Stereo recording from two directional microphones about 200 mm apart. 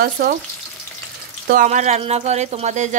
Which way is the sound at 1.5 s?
40° right (ahead or behind).